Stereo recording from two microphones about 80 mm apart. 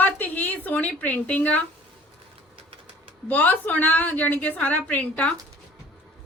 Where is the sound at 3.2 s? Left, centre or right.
Left.